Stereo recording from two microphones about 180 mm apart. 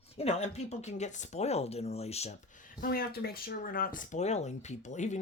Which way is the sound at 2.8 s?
55° left (ahead or behind).